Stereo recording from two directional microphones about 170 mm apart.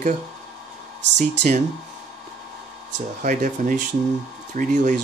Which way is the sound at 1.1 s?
45° right (ahead or behind).